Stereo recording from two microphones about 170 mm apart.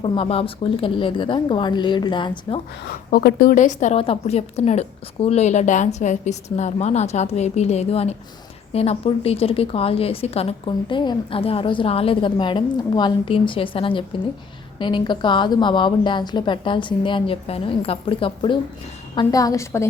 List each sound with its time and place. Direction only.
0.0 s a woman's voice: 30° left (ahead or behind)
2.9 s speech: 65° left (ahead or behind)
3.5 s a woman's voice: 45° left (ahead or behind); by 19.9 s 15° left (ahead or behind)